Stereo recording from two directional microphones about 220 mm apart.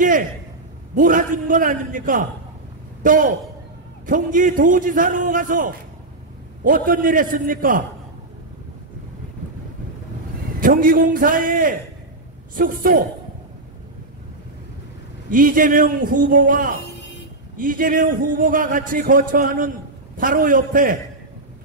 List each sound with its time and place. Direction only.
0.9 s a man's voice: 35° right (ahead or behind)
10.6 s a man's voice: 40° right (ahead or behind)
15.2 s a man's voice: 40° right (ahead or behind)